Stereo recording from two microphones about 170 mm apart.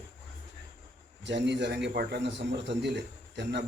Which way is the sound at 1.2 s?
90° right.